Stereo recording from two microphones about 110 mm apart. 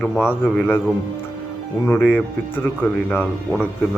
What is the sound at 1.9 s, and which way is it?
Speech, 15° left (ahead or behind).